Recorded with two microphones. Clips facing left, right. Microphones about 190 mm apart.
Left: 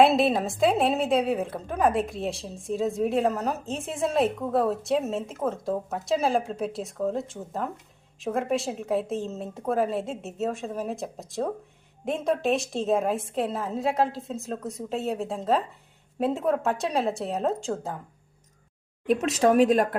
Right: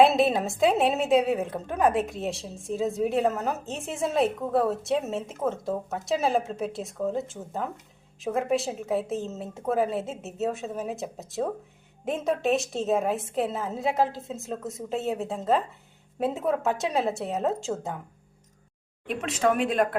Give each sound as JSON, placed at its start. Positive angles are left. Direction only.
{"t": 0.0, "sound": "a woman's voice", "side_deg": 0}
{"t": 19.0, "sound": "speech", "side_deg": 40}